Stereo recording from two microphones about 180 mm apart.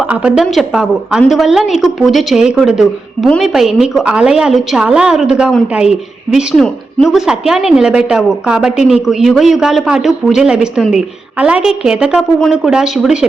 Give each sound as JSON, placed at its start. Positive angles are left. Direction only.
{"t": 0.1, "sound": "a woman's voice", "side_deg": -5}